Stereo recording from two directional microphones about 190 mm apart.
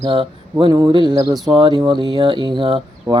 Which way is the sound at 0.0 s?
25° right (ahead or behind).